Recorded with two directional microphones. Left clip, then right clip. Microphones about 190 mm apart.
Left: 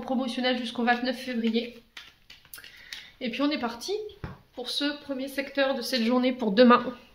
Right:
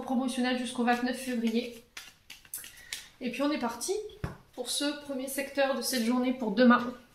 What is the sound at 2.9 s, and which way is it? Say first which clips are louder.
Speech: left 3 dB; 40° left (ahead or behind).